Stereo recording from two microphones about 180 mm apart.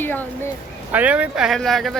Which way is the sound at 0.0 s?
10° left (ahead or behind).